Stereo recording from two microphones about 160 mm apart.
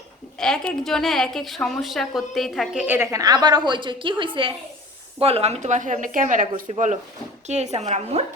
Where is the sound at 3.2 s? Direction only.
25° right (ahead or behind); by 6.6 s 55° right (ahead or behind).